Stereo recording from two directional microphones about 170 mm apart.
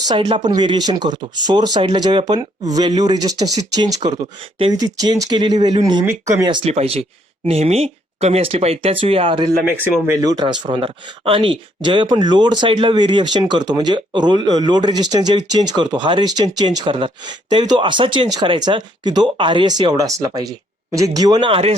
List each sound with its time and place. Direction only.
0.3 s speech: 25° right (ahead or behind)
9.7 s speech: 15° right (ahead or behind); by 21.8 s 35° right (ahead or behind)